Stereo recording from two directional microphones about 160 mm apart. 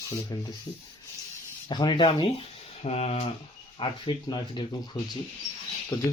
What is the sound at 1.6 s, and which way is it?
Speech, 30° left (ahead or behind).